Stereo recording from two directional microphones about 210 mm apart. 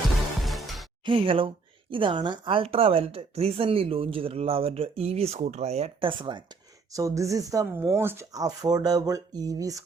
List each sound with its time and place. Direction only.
0.4 s music: centre (ahead or behind)
1.0 s speech: 25° right (ahead or behind)